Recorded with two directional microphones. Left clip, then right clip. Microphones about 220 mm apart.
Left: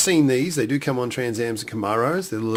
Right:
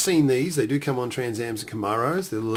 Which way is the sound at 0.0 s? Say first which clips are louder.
Left 2 dB; 30° left (ahead or behind).